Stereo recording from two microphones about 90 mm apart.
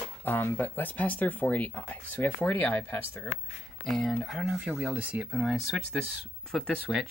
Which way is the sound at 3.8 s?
5° left (ahead or behind).